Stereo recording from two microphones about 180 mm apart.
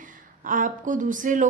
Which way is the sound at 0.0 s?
50° right (ahead or behind).